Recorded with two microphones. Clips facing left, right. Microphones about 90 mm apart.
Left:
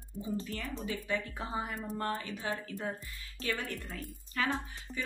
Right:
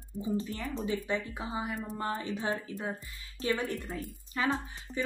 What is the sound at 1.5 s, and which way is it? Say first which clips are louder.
Speech: right 1 dB; 10° right (ahead or behind).